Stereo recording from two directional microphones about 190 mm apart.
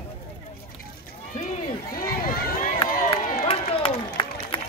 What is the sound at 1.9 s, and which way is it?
Run, 50° left (ahead or behind).